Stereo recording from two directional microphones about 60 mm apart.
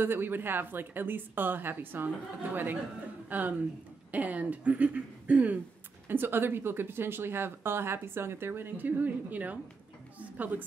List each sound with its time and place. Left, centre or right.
0.0 s a woman's voice: right
6.0 s a woman's voice: right